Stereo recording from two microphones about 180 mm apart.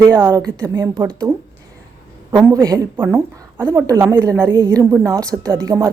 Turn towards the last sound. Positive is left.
turn(degrees=-20)  # may be behind; listen again after turning